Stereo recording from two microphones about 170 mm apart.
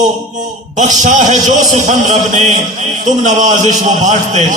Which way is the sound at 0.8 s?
45° right (ahead or behind).